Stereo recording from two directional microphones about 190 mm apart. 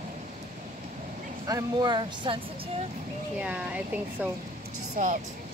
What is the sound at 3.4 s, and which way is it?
Speech, 5° right (ahead or behind).